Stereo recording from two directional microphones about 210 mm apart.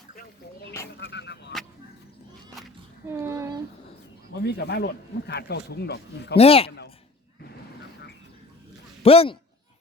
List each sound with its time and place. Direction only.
0.9 s speech: 55° left (ahead or behind)
3.1 s a sound: 15° right (ahead or behind)
4.4 s speech: 50° left (ahead or behind)
6.3 s speech: 30° left (ahead or behind)
9.0 s speech: 25° left (ahead or behind)